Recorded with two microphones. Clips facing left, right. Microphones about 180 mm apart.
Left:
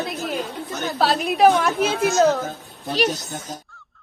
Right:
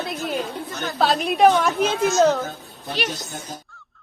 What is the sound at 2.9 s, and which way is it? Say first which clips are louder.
Speech: left 6 dB; 40° left (ahead or behind).